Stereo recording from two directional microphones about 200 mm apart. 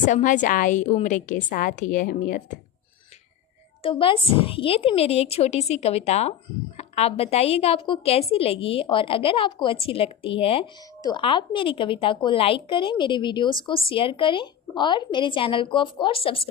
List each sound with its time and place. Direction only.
0.0 s a woman's voice: 40° left (ahead or behind)
3.8 s a woman's voice: 25° left (ahead or behind)